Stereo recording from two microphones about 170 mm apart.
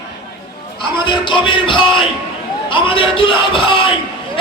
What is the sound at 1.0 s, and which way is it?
Music, 30° left (ahead or behind).